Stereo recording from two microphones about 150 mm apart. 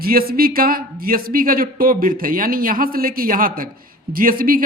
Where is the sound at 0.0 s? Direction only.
75° right (ahead or behind).